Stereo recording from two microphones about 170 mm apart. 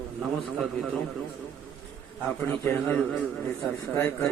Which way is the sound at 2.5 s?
10° left (ahead or behind).